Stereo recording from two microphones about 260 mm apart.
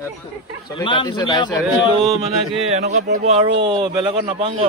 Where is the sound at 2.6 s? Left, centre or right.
Right.